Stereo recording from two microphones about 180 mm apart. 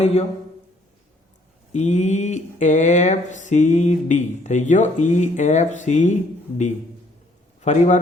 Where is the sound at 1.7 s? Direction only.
40° left (ahead or behind).